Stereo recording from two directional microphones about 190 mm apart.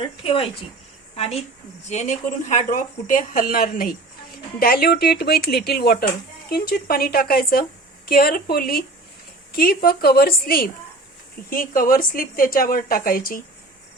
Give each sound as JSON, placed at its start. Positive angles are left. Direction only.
{"t": 0.0, "sound": "a woman's voice", "side_deg": 30}